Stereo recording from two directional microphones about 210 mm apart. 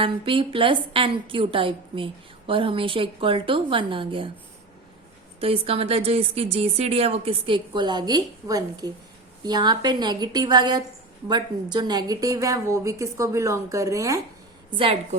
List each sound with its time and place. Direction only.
0.0 s speech: 25° right (ahead or behind)
5.4 s speech: 25° right (ahead or behind)